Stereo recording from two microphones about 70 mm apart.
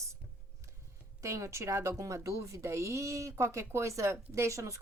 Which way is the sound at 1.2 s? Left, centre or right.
Right.